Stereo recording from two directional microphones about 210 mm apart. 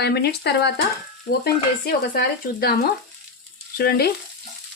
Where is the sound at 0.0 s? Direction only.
50° left (ahead or behind).